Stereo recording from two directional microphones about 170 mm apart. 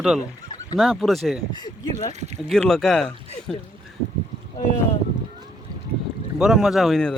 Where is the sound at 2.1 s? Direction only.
40° right (ahead or behind).